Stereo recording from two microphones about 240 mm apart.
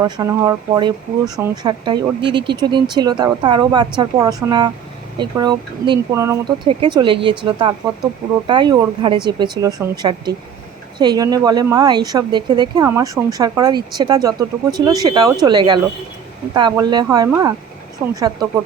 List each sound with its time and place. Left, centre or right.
0.0 s a woman's voice: centre